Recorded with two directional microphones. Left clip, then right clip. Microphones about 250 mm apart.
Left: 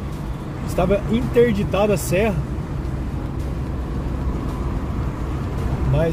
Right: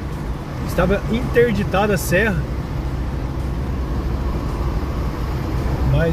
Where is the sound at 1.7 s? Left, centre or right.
Centre.